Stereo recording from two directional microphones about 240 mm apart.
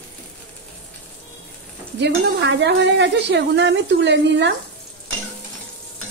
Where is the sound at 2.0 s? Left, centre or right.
Right.